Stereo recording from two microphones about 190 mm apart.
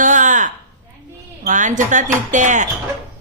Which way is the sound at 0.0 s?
40° right (ahead or behind).